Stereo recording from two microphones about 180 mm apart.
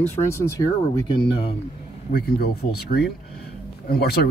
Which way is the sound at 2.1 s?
60° left (ahead or behind).